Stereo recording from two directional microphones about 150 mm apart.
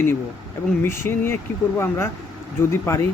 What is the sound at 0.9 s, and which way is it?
Speech, 15° left (ahead or behind).